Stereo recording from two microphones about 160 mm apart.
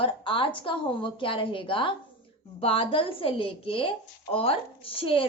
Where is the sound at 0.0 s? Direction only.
35° left (ahead or behind).